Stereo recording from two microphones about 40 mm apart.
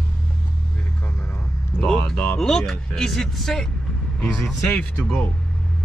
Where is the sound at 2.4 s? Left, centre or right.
Centre.